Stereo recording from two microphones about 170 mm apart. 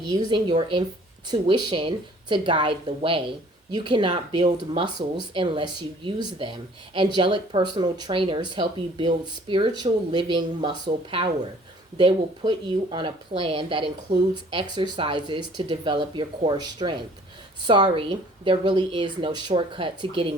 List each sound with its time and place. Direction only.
0.1 s a woman's voice: 25° right (ahead or behind)